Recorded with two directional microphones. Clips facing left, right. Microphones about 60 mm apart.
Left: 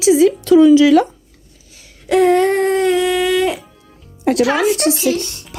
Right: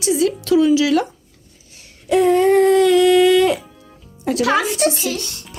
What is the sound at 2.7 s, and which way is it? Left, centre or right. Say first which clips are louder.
Speech: right 2 dB; left.